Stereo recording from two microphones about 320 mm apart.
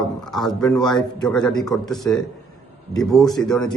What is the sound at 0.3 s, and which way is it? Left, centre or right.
Speech, centre.